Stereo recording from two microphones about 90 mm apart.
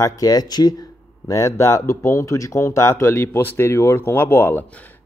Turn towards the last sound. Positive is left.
turn(degrees=25)  # may be behind; listen again after turning